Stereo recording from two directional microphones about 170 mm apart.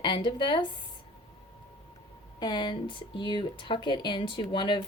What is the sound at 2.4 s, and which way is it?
Speech, 25° left (ahead or behind).